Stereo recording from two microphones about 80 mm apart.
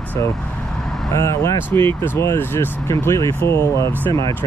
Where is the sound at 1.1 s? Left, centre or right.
Left.